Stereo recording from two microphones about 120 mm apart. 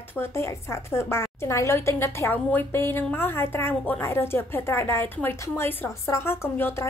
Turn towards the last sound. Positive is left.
turn(degrees=20)  # may be behind; listen again after turning